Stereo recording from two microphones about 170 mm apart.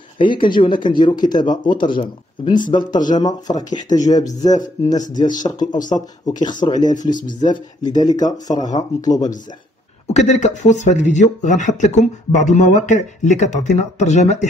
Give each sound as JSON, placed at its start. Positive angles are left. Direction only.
{"t": 0.2, "sound": "speech", "side_deg": 30}
{"t": 10.0, "sound": "speech", "side_deg": 45}